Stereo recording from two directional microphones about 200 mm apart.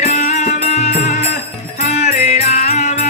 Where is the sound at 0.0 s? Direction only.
35° left (ahead or behind).